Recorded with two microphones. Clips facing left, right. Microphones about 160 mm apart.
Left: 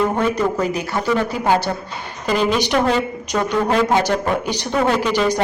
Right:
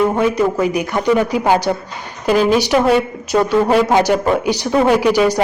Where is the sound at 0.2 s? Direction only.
10° right (ahead or behind).